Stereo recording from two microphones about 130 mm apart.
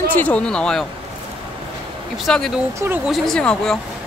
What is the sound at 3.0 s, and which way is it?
Speech, centre (ahead or behind).